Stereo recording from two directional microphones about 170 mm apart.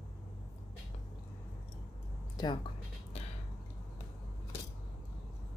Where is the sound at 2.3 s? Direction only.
25° left (ahead or behind).